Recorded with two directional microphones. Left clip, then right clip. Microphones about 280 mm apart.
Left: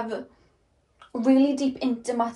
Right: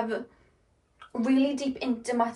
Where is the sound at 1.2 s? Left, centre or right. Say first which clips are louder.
Left 5 dB; left.